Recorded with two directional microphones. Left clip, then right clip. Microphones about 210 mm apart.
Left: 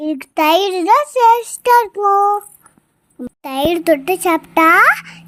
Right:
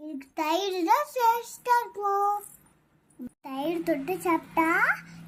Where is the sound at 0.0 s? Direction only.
45° left (ahead or behind).